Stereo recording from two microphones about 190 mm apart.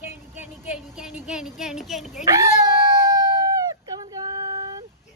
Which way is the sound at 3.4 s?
20° right (ahead or behind).